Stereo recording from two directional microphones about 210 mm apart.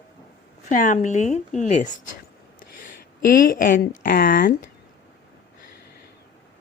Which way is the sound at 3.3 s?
40° left (ahead or behind).